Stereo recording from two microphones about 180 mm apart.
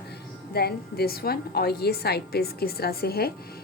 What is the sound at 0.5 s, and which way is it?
A woman's voice, 60° left (ahead or behind).